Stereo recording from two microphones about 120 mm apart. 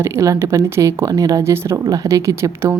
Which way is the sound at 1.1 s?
30° right (ahead or behind).